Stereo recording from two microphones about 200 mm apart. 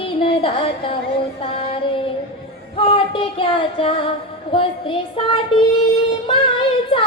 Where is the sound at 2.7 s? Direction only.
25° left (ahead or behind).